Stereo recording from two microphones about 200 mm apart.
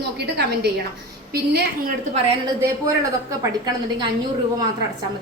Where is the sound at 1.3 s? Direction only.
50° right (ahead or behind).